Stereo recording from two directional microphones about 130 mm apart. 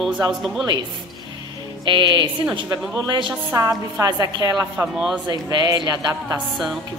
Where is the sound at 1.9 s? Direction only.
35° right (ahead or behind).